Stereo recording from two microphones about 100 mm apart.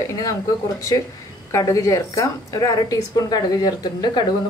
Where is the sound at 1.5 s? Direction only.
30° left (ahead or behind).